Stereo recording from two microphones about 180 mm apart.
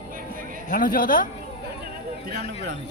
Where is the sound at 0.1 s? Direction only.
50° right (ahead or behind).